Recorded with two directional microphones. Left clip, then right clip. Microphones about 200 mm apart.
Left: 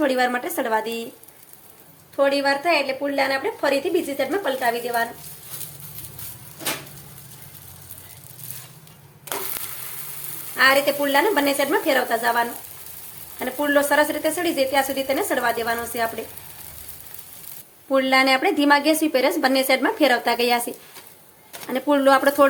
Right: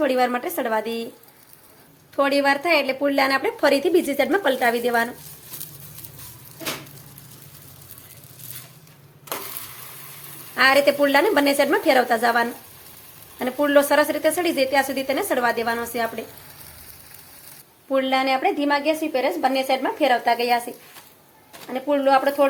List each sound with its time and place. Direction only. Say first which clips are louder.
0.0 s speech: even; centre (ahead or behind)
2.1 s a woman's voice: even; 25° right (ahead or behind)
10.6 s a woman's voice: right 1 dB; 25° right (ahead or behind); by 16.2 s 10° right (ahead or behind)
17.8 s a woman's voice: left 3 dB; 10° left (ahead or behind)